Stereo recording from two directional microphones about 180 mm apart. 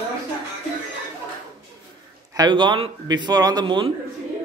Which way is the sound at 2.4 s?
25° right (ahead or behind).